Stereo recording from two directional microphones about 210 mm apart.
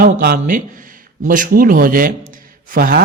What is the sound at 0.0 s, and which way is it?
Speech, 45° right (ahead or behind).